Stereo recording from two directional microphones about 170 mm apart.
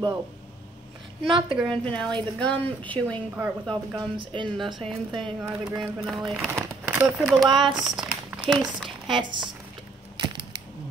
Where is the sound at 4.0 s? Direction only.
30° right (ahead or behind).